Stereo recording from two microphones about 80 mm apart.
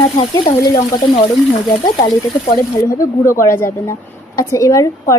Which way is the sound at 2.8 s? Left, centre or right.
Left.